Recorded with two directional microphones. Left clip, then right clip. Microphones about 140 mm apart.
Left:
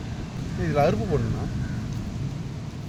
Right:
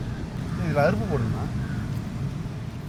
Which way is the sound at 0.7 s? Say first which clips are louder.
Even; 40° left (ahead or behind).